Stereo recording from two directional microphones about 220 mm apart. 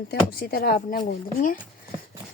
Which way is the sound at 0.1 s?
40° left (ahead or behind).